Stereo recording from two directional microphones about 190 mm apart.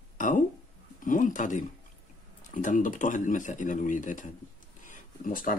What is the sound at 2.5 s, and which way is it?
Speech, 45° left (ahead or behind).